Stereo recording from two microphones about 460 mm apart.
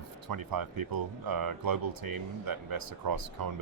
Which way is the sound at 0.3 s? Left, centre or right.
Right.